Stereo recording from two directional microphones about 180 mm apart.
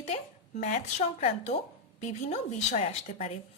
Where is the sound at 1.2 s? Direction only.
40° left (ahead or behind).